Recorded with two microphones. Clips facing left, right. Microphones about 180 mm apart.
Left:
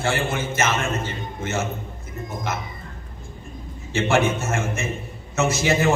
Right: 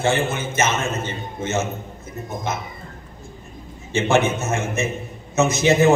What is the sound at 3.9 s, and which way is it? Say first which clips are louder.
Speech: right 2 dB; 20° right (ahead or behind).